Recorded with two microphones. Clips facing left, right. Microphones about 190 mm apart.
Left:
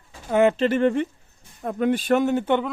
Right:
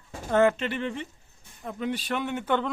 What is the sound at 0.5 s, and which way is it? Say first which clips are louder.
Speech: left 11 dB; 45° left (ahead or behind).